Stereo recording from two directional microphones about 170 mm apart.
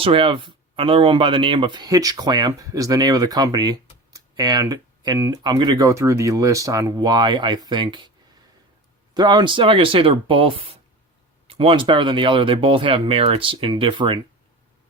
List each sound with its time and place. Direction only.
0.0 s speech: 30° right (ahead or behind)
9.1 s speech: 25° right (ahead or behind)